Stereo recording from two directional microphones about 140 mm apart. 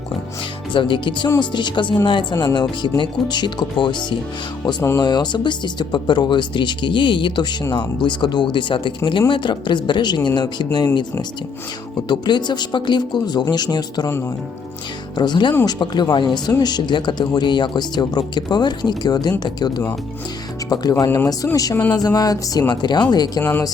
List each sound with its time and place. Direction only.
0.7 s speech: 35° left (ahead or behind)
4.8 s speech: 20° left (ahead or behind)
5.0 s speech: 30° left (ahead or behind)
12.0 s speech: 30° left (ahead or behind)
15.1 s speech: 30° left (ahead or behind)
20.9 s speech: 20° left (ahead or behind)
23.4 s speech: 15° left (ahead or behind)